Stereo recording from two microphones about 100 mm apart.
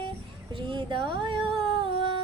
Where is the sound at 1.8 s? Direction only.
55° right (ahead or behind).